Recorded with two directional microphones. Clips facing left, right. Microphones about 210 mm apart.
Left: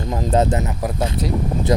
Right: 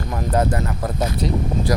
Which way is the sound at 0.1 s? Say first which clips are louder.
Left 2 dB; 20° left (ahead or behind).